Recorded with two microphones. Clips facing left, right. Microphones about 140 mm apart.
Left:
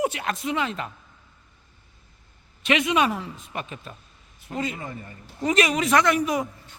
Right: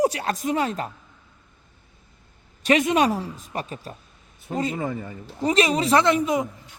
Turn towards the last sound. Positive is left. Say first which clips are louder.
# right 2 dB
turn(degrees=-20)  # may be behind; listen again after turning